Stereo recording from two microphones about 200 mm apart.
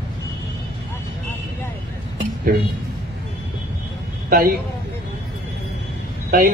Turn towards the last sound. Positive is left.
turn(degrees=-45)  # may be behind; listen again after turning